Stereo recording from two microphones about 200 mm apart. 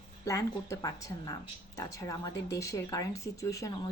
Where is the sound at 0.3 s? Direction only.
15° left (ahead or behind).